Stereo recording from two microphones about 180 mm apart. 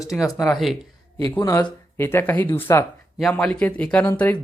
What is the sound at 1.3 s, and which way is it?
Speech, 15° left (ahead or behind).